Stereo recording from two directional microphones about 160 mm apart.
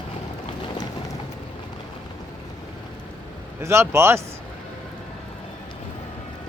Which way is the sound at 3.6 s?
15° right (ahead or behind).